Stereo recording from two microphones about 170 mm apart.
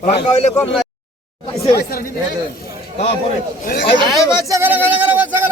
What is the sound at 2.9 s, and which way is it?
Speech, 35° left (ahead or behind).